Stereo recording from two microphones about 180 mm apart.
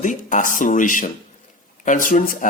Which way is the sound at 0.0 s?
45° left (ahead or behind).